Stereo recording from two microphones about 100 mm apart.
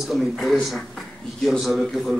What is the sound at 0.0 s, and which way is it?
Speech, centre (ahead or behind).